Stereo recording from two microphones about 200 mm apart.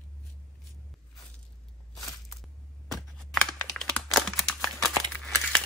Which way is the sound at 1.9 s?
Centre (ahead or behind).